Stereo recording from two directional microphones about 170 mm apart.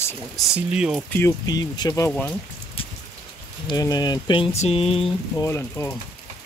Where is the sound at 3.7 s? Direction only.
25° left (ahead or behind).